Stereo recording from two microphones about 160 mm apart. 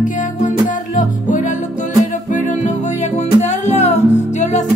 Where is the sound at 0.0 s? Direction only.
55° left (ahead or behind).